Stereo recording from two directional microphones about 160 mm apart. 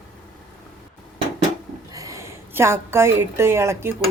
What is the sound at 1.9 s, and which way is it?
A woman's voice, 20° right (ahead or behind).